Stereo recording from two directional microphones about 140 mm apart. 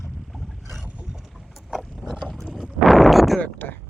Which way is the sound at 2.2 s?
Centre (ahead or behind).